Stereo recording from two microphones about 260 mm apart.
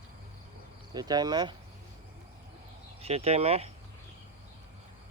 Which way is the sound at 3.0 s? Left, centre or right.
Right.